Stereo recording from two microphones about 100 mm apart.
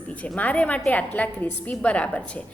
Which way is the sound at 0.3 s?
15° left (ahead or behind).